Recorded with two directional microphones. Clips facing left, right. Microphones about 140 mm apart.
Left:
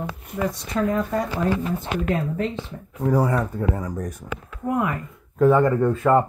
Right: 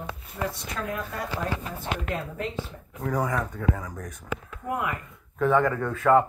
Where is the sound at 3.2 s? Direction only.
35° left (ahead or behind).